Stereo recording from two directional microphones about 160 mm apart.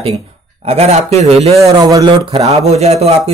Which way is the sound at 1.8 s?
20° right (ahead or behind).